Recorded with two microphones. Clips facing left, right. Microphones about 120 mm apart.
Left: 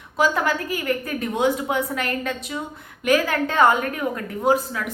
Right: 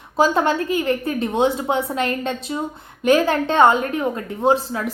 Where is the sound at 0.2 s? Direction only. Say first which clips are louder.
Right 4 dB; 30° right (ahead or behind).